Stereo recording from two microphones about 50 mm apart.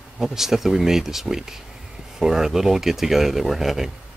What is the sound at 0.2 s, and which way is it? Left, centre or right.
Speech, centre.